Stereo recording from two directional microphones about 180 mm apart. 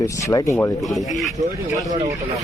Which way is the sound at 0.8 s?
Centre (ahead or behind).